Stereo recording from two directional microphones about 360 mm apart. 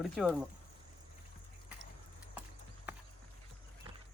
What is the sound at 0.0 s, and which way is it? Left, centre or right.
Speech, centre.